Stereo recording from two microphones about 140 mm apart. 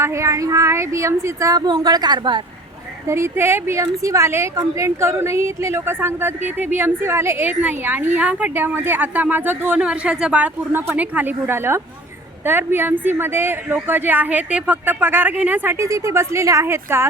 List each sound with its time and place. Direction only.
0.0 s speech: 20° right (ahead or behind)
3.1 s a woman's voice: 20° right (ahead or behind)